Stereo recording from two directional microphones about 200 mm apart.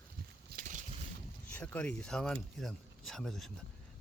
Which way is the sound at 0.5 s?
40° right (ahead or behind).